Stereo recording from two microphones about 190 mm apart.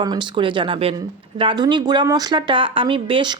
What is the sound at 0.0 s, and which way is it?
Speech, 25° right (ahead or behind).